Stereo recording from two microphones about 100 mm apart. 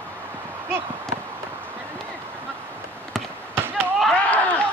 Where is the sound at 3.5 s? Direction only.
20° right (ahead or behind).